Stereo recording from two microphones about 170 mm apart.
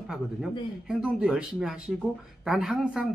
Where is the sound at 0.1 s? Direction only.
5° right (ahead or behind).